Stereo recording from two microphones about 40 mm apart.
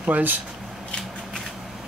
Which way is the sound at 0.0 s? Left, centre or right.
Right.